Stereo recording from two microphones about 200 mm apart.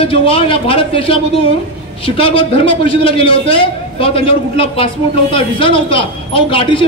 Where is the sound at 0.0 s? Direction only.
25° left (ahead or behind).